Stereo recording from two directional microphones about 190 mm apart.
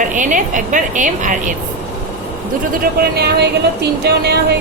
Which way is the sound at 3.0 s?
55° right (ahead or behind).